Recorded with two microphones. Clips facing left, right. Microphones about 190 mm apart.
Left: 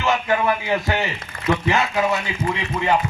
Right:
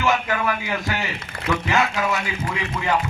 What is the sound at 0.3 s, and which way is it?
Speech, 30° left (ahead or behind).